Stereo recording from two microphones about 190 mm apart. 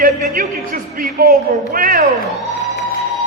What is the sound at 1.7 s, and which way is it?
Speech, 45° right (ahead or behind).